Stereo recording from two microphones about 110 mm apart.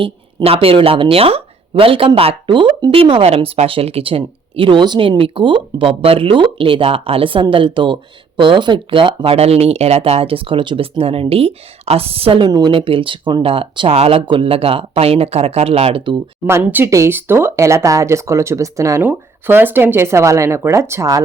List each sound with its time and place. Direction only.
0.4 s speech: 60° right (ahead or behind)
12.5 s speech: 35° right (ahead or behind)
12.7 s speech: 55° right (ahead or behind)
16.5 s speech: 25° right (ahead or behind)
19.0 s speech: 15° right (ahead or behind)